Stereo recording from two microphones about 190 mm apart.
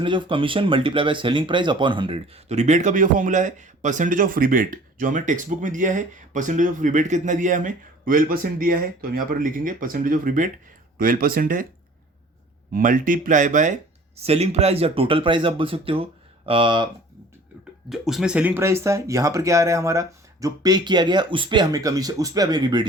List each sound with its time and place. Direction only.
0.0 s speech: 25° right (ahead or behind); by 11.6 s 50° right (ahead or behind)
12.7 s a man's voice: 45° right (ahead or behind); by 16.9 s 25° right (ahead or behind)
17.8 s speech: centre (ahead or behind); by 22.9 s 25° right (ahead or behind)